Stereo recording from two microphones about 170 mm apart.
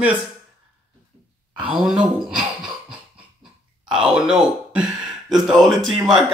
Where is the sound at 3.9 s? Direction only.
5° right (ahead or behind).